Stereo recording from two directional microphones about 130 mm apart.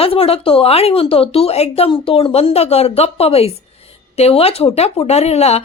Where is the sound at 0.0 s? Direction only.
45° left (ahead or behind).